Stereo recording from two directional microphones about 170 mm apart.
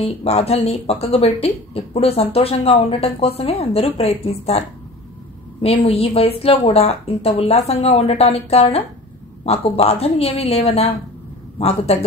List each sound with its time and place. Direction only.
0.0 s speech: 35° left (ahead or behind)